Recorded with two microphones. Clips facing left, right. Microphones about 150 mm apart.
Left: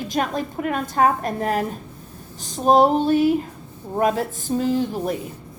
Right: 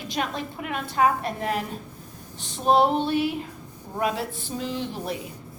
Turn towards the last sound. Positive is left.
turn(degrees=45)  # may be behind; listen again after turning